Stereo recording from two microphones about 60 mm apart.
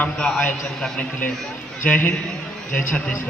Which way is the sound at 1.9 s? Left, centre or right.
Left.